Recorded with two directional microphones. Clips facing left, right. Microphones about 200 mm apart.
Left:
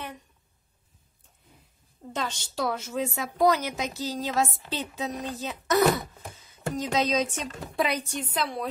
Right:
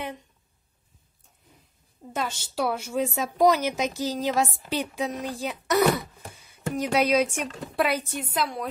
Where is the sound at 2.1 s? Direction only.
10° right (ahead or behind).